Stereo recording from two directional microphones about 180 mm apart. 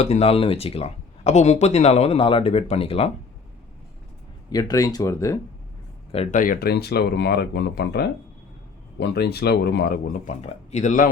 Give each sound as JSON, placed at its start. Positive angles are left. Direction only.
{"t": 0.0, "sound": "speech", "side_deg": 35}
{"t": 4.4, "sound": "speech", "side_deg": 20}
{"t": 6.3, "sound": "speech", "side_deg": 50}